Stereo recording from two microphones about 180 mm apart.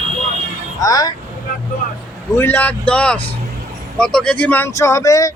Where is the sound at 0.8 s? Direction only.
20° left (ahead or behind).